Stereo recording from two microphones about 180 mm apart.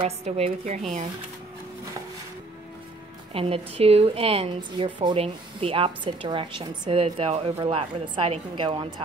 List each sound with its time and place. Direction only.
0.0 s speech: 35° right (ahead or behind)
3.3 s speech: 30° right (ahead or behind)